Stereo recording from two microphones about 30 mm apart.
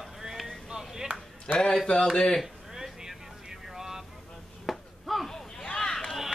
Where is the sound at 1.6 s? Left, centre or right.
Centre.